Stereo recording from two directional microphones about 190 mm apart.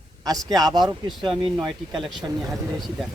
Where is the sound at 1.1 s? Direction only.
Centre (ahead or behind).